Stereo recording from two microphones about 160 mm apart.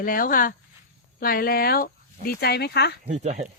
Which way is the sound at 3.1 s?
45° right (ahead or behind).